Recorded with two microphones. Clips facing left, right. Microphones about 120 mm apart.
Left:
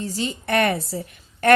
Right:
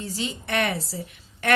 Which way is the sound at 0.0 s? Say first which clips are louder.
Left 4 dB; 45° left (ahead or behind).